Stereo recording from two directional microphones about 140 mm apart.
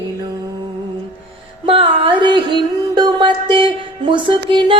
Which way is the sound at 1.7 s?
40° right (ahead or behind).